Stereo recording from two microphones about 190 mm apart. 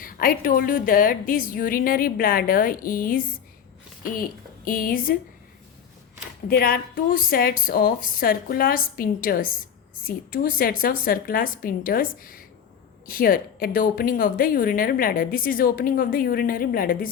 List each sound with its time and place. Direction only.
0.0 s a woman's voice: 50° left (ahead or behind)
6.5 s a woman's voice: 50° left (ahead or behind)